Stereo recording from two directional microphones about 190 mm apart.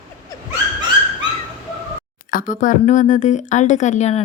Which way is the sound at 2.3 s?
45° left (ahead or behind).